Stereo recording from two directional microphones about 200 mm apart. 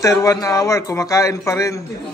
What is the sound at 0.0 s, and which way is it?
A man's voice, 15° left (ahead or behind).